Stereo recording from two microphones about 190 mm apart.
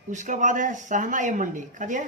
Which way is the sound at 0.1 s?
40° right (ahead or behind).